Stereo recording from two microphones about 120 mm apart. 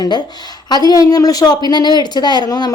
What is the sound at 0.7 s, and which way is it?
A woman's voice, 35° left (ahead or behind).